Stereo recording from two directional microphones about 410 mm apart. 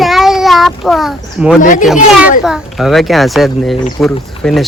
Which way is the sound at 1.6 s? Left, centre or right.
Centre.